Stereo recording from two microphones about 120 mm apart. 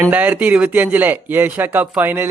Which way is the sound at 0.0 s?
15° right (ahead or behind).